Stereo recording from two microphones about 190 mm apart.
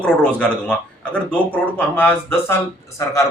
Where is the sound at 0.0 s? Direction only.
5° left (ahead or behind).